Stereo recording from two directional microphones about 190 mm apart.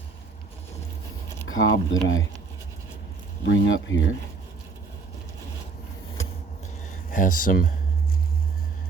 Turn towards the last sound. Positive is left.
turn(degrees=45)  # may be behind; listen again after turning